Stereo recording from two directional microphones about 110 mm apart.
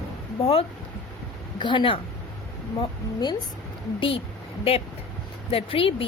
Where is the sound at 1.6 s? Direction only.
45° left (ahead or behind).